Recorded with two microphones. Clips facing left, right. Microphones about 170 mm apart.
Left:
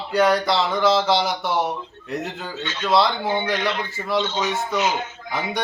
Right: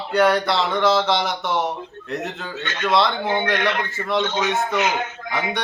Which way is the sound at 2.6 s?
55° right (ahead or behind).